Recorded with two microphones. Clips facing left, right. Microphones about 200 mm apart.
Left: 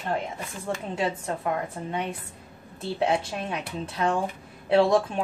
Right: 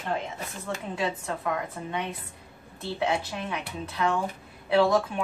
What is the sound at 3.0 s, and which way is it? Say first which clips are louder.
Speech: left 3 dB; 30° left (ahead or behind).